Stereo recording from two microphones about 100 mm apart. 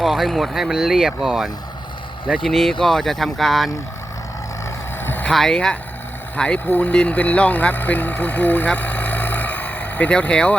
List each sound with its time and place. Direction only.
0.0 s speech: centre (ahead or behind)
5.0 s vehicle: 20° left (ahead or behind)
5.3 s speech: 5° left (ahead or behind)